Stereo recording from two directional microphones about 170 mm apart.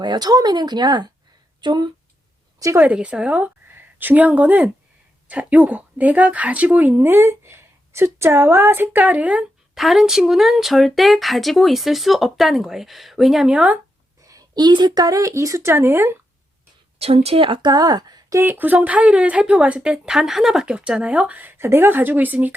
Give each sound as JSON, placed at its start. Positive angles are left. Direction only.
{"t": 0.0, "sound": "speech", "side_deg": -25}
{"t": 2.6, "sound": "a woman's voice", "side_deg": -15}
{"t": 14.2, "sound": "speech", "side_deg": -20}
{"t": 17.0, "sound": "speech", "side_deg": -35}